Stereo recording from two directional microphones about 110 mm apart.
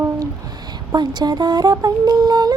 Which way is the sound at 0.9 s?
40° right (ahead or behind).